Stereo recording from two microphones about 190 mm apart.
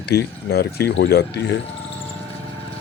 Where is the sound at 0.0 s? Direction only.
55° left (ahead or behind).